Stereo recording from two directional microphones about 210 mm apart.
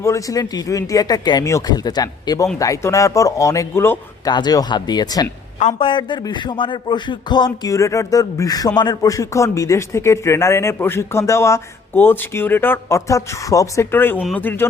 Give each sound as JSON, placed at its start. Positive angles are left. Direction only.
{"t": 0.0, "sound": "a man's voice", "side_deg": 15}
{"t": 5.5, "sound": "a man's voice", "side_deg": 30}